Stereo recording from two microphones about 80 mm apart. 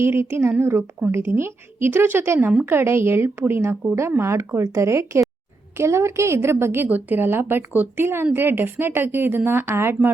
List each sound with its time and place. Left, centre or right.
0.0 s a woman's voice: right